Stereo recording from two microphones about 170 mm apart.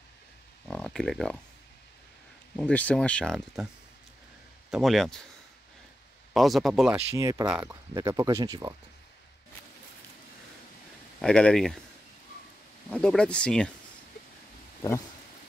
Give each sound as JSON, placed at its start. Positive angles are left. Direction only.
{"t": 0.7, "sound": "speech", "side_deg": 5}
{"t": 2.5, "sound": "speech", "side_deg": 10}
{"t": 4.6, "sound": "speech", "side_deg": 0}
{"t": 6.3, "sound": "speech", "side_deg": 0}
{"t": 6.9, "sound": "speech", "side_deg": -20}
{"t": 11.1, "sound": "speech", "side_deg": 5}
{"t": 12.9, "sound": "speech", "side_deg": 5}